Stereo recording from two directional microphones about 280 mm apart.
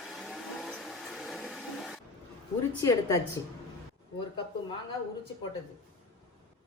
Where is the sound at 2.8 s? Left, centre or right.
Centre.